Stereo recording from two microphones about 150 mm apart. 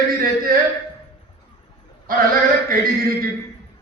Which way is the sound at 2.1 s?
70° right (ahead or behind).